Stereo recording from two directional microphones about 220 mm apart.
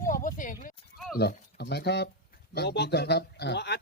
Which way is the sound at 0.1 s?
40° left (ahead or behind).